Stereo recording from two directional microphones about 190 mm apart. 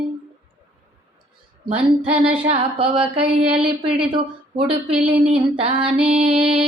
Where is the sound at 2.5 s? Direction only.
30° right (ahead or behind).